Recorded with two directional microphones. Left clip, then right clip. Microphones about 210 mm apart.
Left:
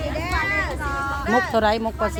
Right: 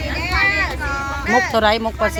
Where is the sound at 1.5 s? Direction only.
10° left (ahead or behind).